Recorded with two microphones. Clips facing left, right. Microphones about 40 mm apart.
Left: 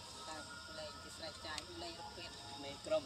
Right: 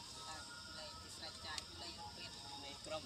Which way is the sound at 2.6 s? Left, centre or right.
Centre.